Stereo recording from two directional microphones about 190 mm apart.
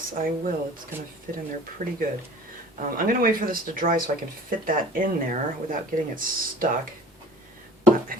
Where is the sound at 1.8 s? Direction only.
35° right (ahead or behind).